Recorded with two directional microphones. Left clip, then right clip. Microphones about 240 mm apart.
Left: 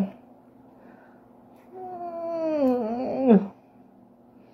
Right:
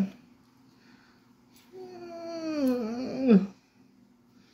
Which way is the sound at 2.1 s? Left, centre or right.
Centre.